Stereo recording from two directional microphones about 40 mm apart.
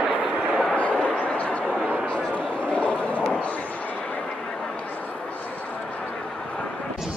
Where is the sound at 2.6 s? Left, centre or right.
Left.